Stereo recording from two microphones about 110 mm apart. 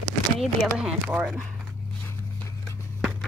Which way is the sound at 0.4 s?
5° right (ahead or behind).